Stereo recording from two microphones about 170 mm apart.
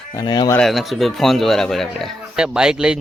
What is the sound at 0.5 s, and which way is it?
A man's voice, centre (ahead or behind).